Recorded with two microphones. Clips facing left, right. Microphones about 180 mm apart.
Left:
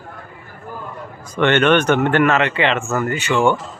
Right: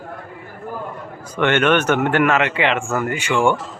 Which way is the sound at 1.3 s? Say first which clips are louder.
Left 2 dB; 10° right (ahead or behind).